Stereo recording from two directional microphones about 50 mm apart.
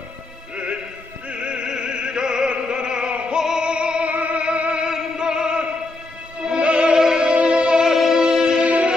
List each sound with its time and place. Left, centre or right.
1.3 s opera: centre
4.8 s music: centre